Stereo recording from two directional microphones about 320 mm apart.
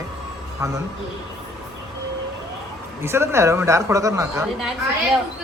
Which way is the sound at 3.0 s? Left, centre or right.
Centre.